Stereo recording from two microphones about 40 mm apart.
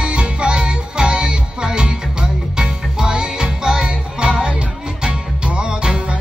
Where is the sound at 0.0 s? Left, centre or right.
Right.